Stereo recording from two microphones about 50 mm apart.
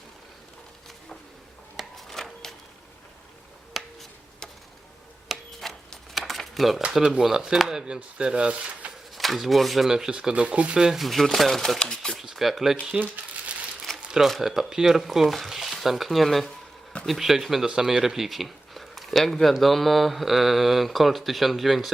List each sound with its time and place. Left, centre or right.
1.7 s a sound: centre
3.8 s a sound: centre
5.5 s a sound: centre
7.0 s speech: centre
9.1 s speech: centre
10.1 s speech: centre
10.8 s speech: centre
11.0 s speech: centre
11.8 s typewriter: centre
12.2 s a sound: centre
13.0 s speech: right
14.2 s speech: centre